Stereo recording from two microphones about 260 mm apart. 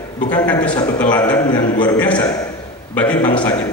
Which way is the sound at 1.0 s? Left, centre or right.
Centre.